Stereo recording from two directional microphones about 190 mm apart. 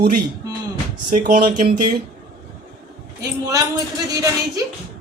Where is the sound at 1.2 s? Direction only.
50° right (ahead or behind).